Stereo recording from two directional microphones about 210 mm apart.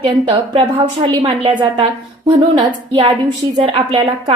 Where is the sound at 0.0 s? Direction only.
25° right (ahead or behind).